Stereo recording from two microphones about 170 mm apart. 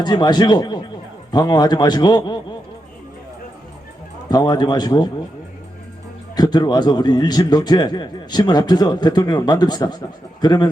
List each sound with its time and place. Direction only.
0.0 s speech: 25° left (ahead or behind)
4.3 s speech: 25° left (ahead or behind)
6.3 s speech: 25° left (ahead or behind)